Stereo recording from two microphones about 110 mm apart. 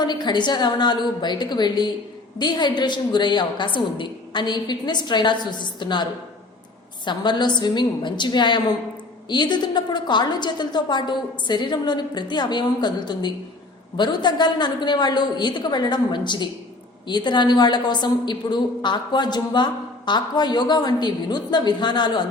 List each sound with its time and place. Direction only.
0.0 s a woman's voice: 40° left (ahead or behind)